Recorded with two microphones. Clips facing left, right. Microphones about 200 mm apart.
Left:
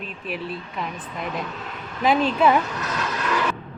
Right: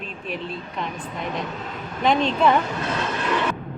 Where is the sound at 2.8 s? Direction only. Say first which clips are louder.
Right 3 dB; 30° right (ahead or behind).